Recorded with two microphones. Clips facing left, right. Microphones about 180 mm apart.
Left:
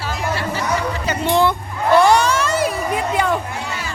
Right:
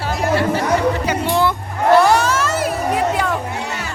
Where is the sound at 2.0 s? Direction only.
5° right (ahead or behind).